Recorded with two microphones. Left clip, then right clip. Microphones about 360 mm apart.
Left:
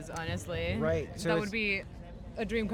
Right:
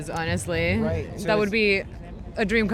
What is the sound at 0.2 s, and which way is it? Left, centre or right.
Speech, right.